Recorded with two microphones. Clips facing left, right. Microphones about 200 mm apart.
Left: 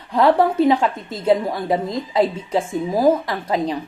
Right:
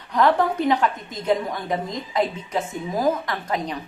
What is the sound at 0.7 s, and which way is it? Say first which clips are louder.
A woman's voice: left 3 dB; 25° left (ahead or behind).